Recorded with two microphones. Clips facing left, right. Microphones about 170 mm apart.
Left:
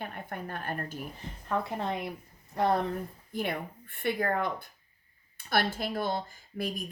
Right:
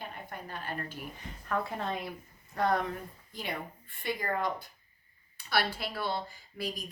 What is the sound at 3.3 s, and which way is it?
Speech, 55° left (ahead or behind).